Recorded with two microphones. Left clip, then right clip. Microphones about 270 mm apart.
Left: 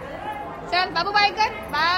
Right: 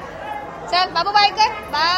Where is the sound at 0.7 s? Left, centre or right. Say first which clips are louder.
Right 4 dB; centre.